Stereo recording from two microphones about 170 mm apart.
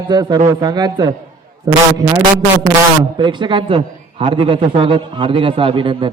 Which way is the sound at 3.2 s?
30° right (ahead or behind).